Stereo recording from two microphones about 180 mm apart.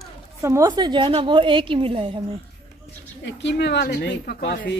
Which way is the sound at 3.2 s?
75° left (ahead or behind).